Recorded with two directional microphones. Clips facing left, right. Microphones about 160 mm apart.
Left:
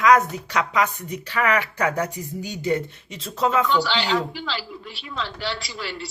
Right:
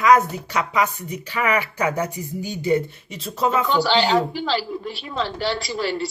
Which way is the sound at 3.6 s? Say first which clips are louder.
Right 3 dB; 45° right (ahead or behind).